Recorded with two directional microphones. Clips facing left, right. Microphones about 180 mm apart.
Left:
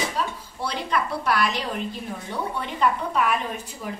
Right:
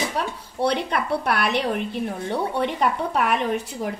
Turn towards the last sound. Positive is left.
turn(degrees=-65)  # may be behind; listen again after turning